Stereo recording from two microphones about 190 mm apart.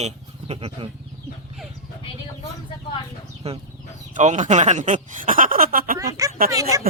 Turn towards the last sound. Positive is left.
turn(degrees=-20)  # may be behind; listen again after turning